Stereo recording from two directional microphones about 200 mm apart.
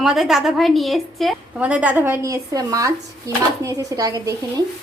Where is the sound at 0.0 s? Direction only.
Centre (ahead or behind); by 4.4 s 20° right (ahead or behind).